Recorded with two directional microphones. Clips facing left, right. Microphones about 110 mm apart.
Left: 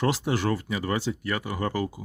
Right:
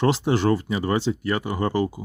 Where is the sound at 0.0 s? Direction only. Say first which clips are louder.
Right 5 dB; 30° right (ahead or behind).